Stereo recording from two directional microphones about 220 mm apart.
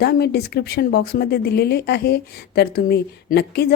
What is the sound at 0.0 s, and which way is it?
Speech, 45° left (ahead or behind).